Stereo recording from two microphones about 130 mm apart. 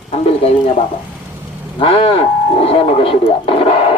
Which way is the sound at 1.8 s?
45° left (ahead or behind).